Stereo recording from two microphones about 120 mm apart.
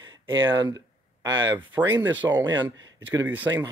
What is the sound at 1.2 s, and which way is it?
Speech, 35° right (ahead or behind).